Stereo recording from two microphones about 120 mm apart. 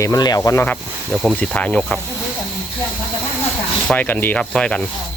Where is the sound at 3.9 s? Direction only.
15° left (ahead or behind).